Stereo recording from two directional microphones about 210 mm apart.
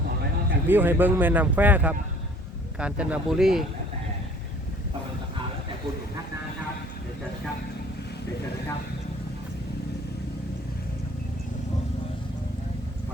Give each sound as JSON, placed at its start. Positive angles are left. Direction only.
{"t": 0.7, "sound": "speech", "side_deg": -10}